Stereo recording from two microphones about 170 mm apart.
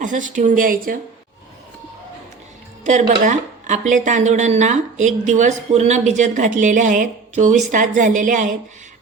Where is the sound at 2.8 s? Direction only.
45° right (ahead or behind).